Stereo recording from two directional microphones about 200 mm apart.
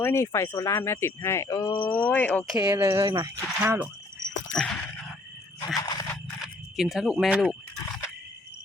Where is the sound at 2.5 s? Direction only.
15° right (ahead or behind).